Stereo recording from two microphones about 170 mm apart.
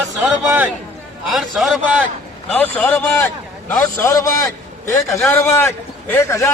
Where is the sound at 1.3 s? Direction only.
Centre (ahead or behind).